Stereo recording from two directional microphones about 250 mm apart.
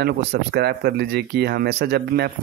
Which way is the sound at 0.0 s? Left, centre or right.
Right.